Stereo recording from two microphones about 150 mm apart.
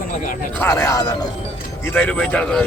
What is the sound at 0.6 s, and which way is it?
Speech, 20° left (ahead or behind).